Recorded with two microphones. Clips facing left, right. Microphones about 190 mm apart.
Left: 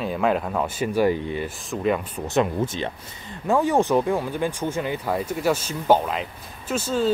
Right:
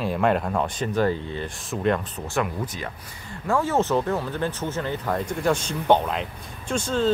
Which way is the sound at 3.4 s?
15° left (ahead or behind).